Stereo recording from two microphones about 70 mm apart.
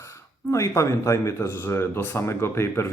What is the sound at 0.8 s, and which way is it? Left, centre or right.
Speech, left.